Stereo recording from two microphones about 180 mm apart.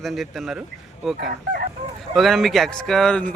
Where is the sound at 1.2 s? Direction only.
60° right (ahead or behind).